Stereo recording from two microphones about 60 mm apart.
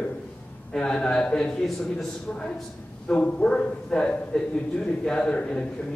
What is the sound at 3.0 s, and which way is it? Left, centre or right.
A man's voice, centre.